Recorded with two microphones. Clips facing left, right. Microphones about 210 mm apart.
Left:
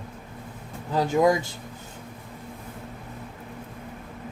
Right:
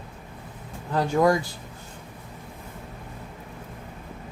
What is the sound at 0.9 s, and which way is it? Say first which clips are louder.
Speech: even; 20° left (ahead or behind).